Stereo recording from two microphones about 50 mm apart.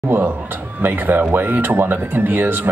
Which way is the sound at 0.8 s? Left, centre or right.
Right.